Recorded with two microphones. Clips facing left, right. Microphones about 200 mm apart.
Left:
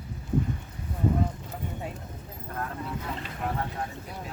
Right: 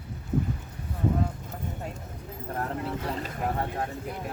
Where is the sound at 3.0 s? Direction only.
40° right (ahead or behind).